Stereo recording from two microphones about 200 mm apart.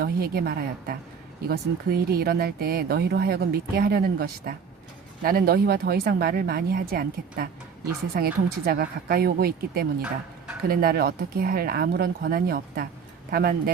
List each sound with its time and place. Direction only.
0.0 s speech: 50° right (ahead or behind)
10.0 s a sound: 5° right (ahead or behind)
10.7 s speech: 50° right (ahead or behind)